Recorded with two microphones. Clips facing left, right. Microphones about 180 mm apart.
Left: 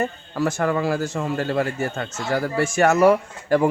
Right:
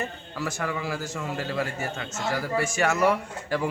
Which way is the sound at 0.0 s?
50° left (ahead or behind).